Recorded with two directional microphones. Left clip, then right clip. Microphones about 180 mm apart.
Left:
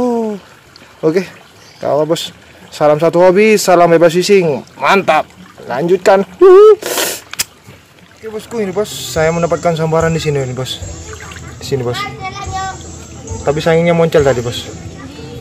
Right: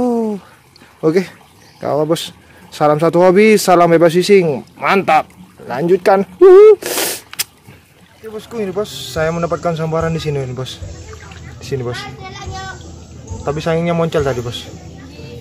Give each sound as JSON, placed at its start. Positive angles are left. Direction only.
{"t": 0.0, "sound": "a sound", "side_deg": -15}
{"t": 1.0, "sound": "speech", "side_deg": -20}
{"t": 5.7, "sound": "a sound", "side_deg": -15}
{"t": 8.4, "sound": "speech", "side_deg": 0}
{"t": 12.2, "sound": "children playing", "side_deg": -15}
{"t": 13.5, "sound": "speech", "side_deg": 0}